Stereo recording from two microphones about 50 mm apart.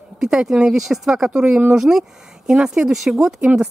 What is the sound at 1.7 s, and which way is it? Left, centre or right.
Speech, centre.